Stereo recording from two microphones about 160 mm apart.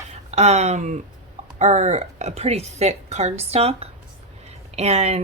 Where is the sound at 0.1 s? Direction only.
45° right (ahead or behind).